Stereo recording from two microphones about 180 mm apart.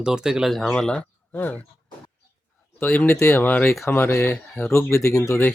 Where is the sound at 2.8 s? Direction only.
10° left (ahead or behind).